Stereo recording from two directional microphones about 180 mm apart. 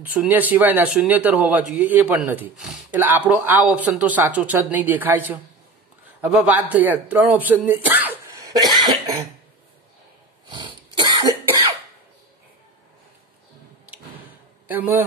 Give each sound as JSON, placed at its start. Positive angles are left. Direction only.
{"t": 0.0, "sound": "a man's voice", "side_deg": -10}
{"t": 10.5, "sound": "cough", "side_deg": -25}
{"t": 14.7, "sound": "a man's voice", "side_deg": -10}